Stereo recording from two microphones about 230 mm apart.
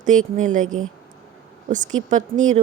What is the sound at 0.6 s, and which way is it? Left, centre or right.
Speech, right.